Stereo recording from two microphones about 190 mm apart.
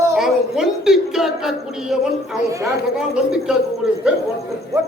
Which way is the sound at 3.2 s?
5° right (ahead or behind).